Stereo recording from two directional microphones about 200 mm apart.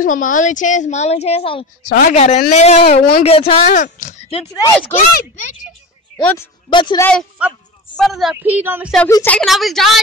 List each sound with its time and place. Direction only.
0.0 s a woman's voice: 40° left (ahead or behind)
1.9 s a woman's voice: 45° left (ahead or behind)
3.3 s speech: 30° left (ahead or behind)
3.6 s a woman's voice: 40° left (ahead or behind)
6.2 s speech: 10° left (ahead or behind)
6.7 s speech: 25° left (ahead or behind)
7.0 s a woman's voice: 5° left (ahead or behind)
9.1 s a woman's voice: 10° left (ahead or behind)